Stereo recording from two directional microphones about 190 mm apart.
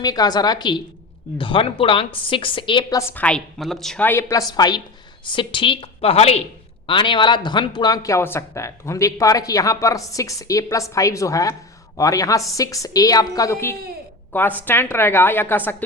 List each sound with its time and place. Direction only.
0.0 s a woman's voice: 20° left (ahead or behind)
3.1 s a woman's voice: 5° left (ahead or behind)